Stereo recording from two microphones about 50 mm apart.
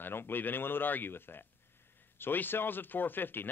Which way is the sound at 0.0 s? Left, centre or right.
Left.